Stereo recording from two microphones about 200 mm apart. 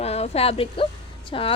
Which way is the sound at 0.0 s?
30° left (ahead or behind).